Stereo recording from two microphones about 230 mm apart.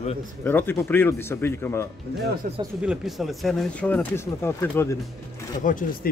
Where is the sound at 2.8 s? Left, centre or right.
Centre.